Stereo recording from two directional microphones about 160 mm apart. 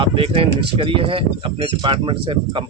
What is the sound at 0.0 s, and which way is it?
Speech, 35° right (ahead or behind).